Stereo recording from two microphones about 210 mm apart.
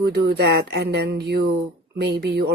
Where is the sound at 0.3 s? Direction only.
50° right (ahead or behind).